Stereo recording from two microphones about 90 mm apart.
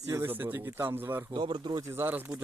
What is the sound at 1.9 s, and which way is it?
Speech, 25° right (ahead or behind).